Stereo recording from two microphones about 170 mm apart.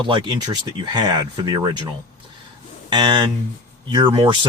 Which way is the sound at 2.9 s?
25° right (ahead or behind).